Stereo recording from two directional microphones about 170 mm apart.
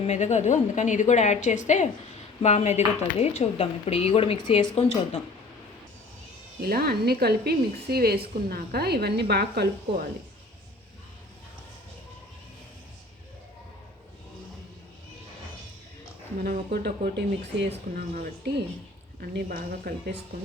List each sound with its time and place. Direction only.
0.0 s a woman's voice: 45° left (ahead or behind); by 4.7 s 25° left (ahead or behind)
4.7 s speech: 40° left (ahead or behind)
6.6 s a woman's voice: 65° right (ahead or behind)
16.4 s speech: 60° right (ahead or behind)
17.9 s speech: 55° right (ahead or behind)